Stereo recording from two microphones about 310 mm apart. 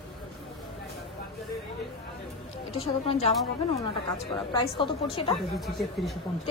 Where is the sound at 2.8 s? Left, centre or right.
Centre.